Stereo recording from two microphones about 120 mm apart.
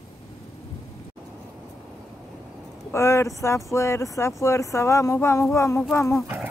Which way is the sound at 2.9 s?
25° left (ahead or behind).